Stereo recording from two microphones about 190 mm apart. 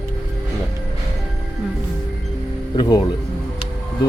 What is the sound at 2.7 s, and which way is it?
Speech, 20° left (ahead or behind).